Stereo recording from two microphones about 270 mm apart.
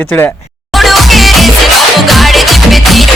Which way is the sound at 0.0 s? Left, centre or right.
Centre.